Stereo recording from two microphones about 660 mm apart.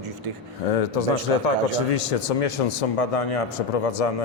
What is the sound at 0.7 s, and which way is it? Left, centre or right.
Speech, left.